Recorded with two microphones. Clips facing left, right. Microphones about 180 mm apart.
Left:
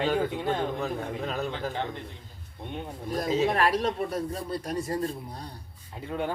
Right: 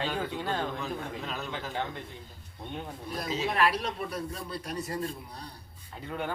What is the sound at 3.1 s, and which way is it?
A man's voice, 45° left (ahead or behind).